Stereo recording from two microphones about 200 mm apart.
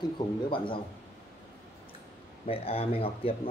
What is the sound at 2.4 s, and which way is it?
Speech, 30° left (ahead or behind).